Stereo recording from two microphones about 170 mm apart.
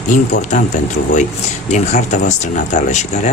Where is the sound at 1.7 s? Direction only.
45° left (ahead or behind).